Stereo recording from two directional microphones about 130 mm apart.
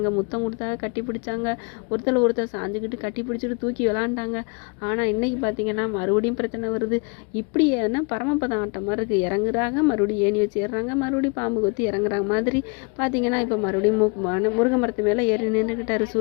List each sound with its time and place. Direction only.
0.3 s a woman's voice: 20° left (ahead or behind)
2.0 s a woman's voice: 20° left (ahead or behind)